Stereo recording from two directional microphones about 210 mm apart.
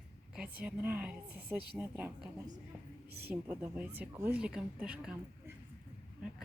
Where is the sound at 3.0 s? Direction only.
50° right (ahead or behind).